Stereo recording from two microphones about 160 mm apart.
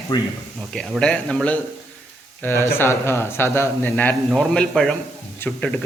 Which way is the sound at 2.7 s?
15° left (ahead or behind).